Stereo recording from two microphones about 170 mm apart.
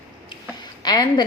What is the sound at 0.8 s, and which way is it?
Speech, 25° left (ahead or behind).